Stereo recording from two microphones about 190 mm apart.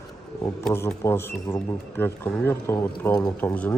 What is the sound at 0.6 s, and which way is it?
Speech, 10° left (ahead or behind).